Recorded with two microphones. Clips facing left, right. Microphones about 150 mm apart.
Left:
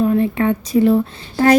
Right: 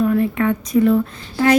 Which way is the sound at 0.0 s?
30° left (ahead or behind).